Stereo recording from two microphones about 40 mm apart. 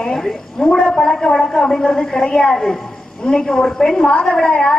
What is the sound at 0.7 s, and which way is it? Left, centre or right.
A woman's voice, left.